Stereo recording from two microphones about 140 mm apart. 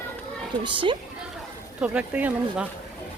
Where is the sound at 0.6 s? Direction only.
35° right (ahead or behind).